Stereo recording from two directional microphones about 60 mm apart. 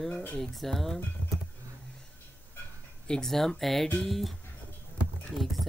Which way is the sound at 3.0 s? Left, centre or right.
Centre.